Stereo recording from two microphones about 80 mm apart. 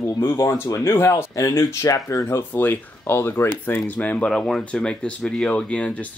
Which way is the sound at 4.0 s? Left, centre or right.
Centre.